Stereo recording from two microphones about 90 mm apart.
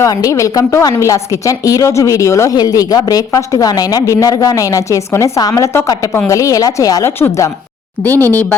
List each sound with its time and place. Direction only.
0.0 s speech: 40° left (ahead or behind)
7.0 s speech: 30° left (ahead or behind)
8.0 s speech: 20° left (ahead or behind)